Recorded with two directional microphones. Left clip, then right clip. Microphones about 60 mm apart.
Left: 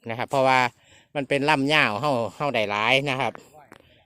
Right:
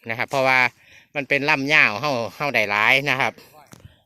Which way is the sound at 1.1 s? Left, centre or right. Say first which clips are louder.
Right 2 dB; left.